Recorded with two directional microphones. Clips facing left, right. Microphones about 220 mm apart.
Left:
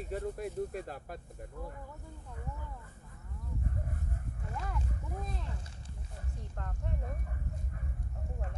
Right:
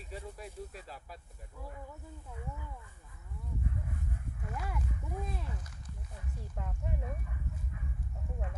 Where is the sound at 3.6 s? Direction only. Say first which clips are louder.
Even; 45° left (ahead or behind).